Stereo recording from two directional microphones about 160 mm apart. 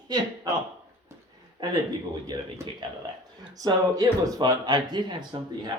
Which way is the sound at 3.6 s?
20° right (ahead or behind).